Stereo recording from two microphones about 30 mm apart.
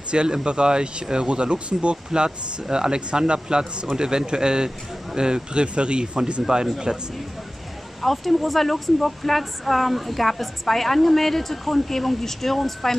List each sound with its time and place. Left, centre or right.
0.1 s speech: right
2.1 s speech: right
6.4 s speech: right
8.0 s speech: centre